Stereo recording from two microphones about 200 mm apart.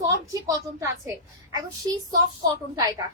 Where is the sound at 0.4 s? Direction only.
15° right (ahead or behind).